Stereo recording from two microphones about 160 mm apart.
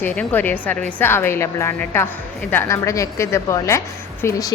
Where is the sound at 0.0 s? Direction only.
10° left (ahead or behind).